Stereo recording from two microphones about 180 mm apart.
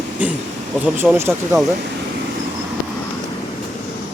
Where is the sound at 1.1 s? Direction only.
15° right (ahead or behind).